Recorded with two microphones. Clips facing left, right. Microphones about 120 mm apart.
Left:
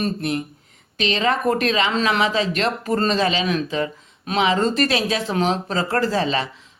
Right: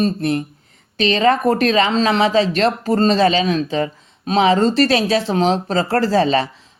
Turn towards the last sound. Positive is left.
turn(degrees=-35)  # may be behind; listen again after turning